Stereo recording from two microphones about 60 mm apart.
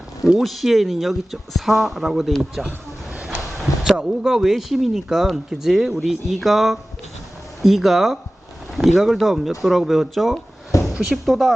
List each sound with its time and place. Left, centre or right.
0.3 s speech: centre
3.9 s speech: centre
10.7 s a sound: left
11.3 s speech: centre